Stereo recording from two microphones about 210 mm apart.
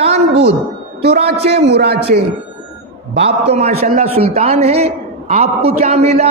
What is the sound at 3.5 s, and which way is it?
A man's voice, 30° right (ahead or behind).